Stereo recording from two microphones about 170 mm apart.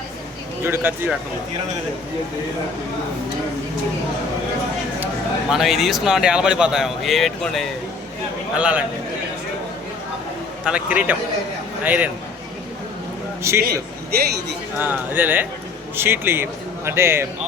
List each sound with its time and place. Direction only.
0.6 s a man's voice: 15° right (ahead or behind)
5.5 s a man's voice: centre (ahead or behind)
10.7 s a man's voice: 10° right (ahead or behind)
13.5 s a man's voice: 15° right (ahead or behind)
14.8 s a man's voice: 10° right (ahead or behind)